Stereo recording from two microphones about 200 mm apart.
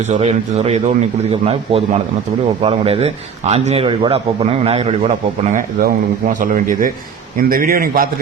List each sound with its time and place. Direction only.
0.1 s a man's voice: 35° right (ahead or behind)